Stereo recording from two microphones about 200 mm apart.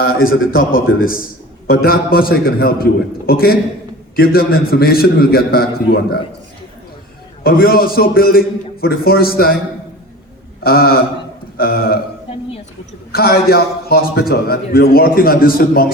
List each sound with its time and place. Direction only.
0.0 s a man's voice: 90° left
1.6 s a man's voice: 50° left (ahead or behind)
7.4 s a man's voice: 50° left (ahead or behind)
10.6 s a sound: 50° left (ahead or behind)
11.5 s a man's voice: 50° left (ahead or behind)
13.1 s a man's voice: 50° left (ahead or behind)